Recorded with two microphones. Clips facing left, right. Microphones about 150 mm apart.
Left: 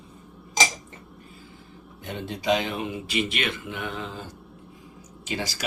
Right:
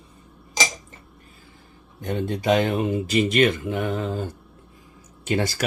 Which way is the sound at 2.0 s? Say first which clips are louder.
Right 4 dB; 45° right (ahead or behind).